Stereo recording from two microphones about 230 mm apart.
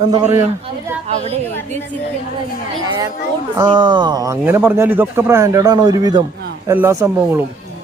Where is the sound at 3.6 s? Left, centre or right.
Centre.